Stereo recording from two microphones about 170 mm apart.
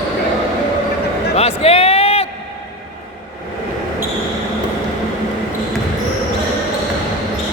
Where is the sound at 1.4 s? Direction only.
35° left (ahead or behind).